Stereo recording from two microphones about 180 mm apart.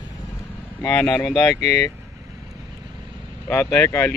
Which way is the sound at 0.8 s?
15° left (ahead or behind).